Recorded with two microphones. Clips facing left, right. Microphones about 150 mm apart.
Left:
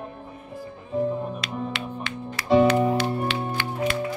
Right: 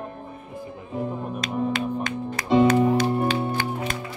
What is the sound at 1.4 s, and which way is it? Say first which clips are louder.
Music: right 5 dB; 45° right (ahead or behind).